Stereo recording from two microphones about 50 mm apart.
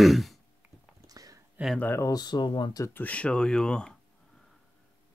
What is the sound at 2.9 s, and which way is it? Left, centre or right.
Speech, left.